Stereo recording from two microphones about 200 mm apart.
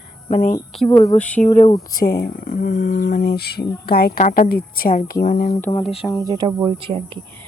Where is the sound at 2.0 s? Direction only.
50° left (ahead or behind).